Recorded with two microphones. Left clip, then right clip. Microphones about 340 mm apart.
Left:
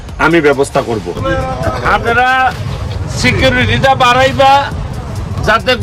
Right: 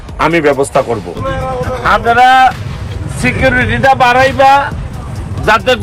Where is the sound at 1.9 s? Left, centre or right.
Right.